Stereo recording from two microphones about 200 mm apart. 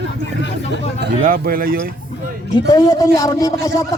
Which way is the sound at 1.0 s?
50° right (ahead or behind).